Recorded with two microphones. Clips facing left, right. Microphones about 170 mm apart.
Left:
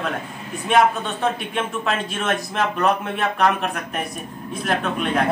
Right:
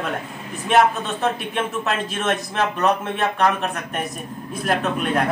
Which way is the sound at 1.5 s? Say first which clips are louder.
Even; centre (ahead or behind).